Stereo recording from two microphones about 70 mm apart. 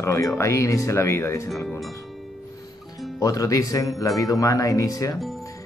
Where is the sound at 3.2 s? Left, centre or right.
Left.